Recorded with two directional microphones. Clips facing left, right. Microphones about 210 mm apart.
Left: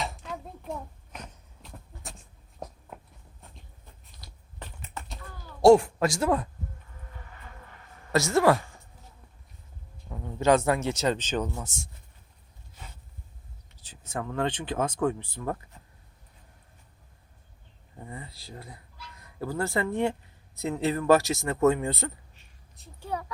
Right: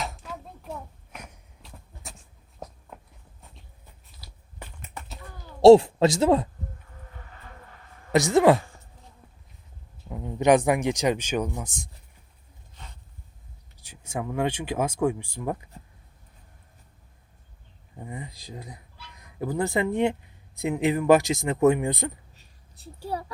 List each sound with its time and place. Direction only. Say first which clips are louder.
0.0 s a sound: even; centre (ahead or behind)
1.6 s goat: left 1 dB; centre (ahead or behind)
2.9 s walk: left 1 dB; 5° left (ahead or behind)
4.1 s finger snapping: even; 5° right (ahead or behind)
5.5 s speech: right 5 dB; 25° right (ahead or behind)
8.1 s speech: right 4 dB; 15° right (ahead or behind)
10.1 s speech: right 3 dB; 20° right (ahead or behind)
13.7 s speech: right 2 dB; 10° right (ahead or behind)
17.9 s speech: right 4 dB; 15° right (ahead or behind)
22.4 s a sound: right 1 dB; 35° right (ahead or behind)